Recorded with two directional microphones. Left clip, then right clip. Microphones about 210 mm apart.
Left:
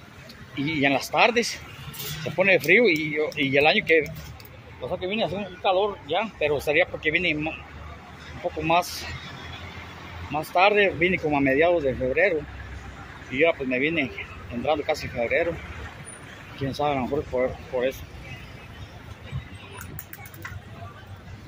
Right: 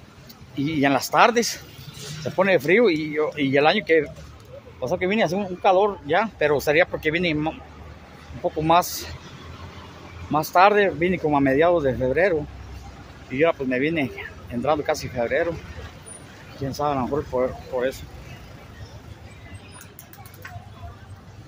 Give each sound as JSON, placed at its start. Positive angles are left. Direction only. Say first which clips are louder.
{"t": 0.6, "sound": "speech", "louder": "right 2 dB", "side_deg": -20}
{"t": 2.3, "sound": "speech", "louder": "even", "side_deg": -15}
{"t": 4.8, "sound": "speech", "louder": "right 5 dB", "side_deg": -35}
{"t": 10.3, "sound": "speech", "louder": "right 4 dB", "side_deg": -20}
{"t": 16.7, "sound": "speech", "louder": "right 1 dB", "side_deg": -10}